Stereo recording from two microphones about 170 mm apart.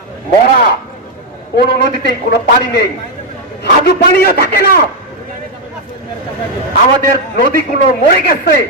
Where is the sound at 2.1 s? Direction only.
65° left (ahead or behind).